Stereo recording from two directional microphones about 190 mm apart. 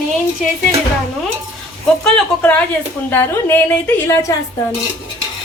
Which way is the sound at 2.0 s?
5° left (ahead or behind).